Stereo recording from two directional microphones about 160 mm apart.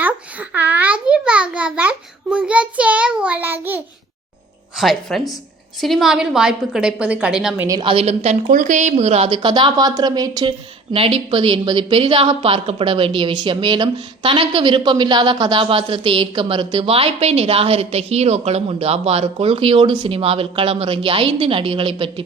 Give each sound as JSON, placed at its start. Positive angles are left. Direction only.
{"t": 0.0, "sound": "a sound", "side_deg": -10}
{"t": 4.8, "sound": "a woman's voice", "side_deg": 0}
{"t": 7.7, "sound": "a woman's voice", "side_deg": -30}
{"t": 10.9, "sound": "a woman's voice", "side_deg": -35}